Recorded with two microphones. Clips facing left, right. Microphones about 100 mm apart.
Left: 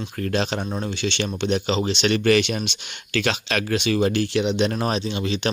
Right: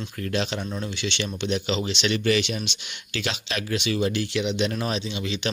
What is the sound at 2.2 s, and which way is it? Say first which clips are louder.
Speech: left 5 dB; 55° left (ahead or behind).